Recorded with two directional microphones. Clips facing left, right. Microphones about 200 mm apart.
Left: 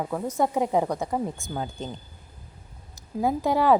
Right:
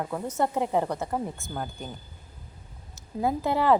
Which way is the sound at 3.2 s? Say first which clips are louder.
Left 2 dB; 10° left (ahead or behind).